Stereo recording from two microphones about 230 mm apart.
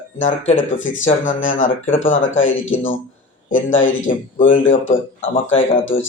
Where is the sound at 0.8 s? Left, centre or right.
Left.